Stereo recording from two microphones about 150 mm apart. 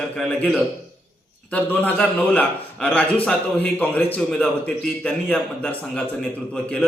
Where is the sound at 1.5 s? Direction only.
10° left (ahead or behind).